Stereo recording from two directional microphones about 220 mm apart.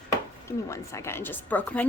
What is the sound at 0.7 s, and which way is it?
A woman's voice, 15° left (ahead or behind).